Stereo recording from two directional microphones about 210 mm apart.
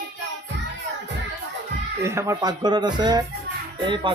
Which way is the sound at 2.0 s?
15° right (ahead or behind).